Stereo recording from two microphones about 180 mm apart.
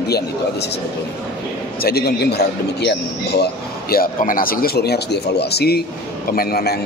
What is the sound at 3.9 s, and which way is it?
A man's voice, 50° left (ahead or behind).